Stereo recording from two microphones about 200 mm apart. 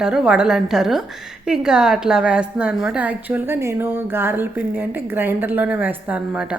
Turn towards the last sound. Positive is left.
turn(degrees=-5)  # may be behind; listen again after turning